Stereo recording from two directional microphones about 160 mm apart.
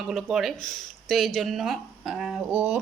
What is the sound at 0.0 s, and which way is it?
Speech, centre (ahead or behind).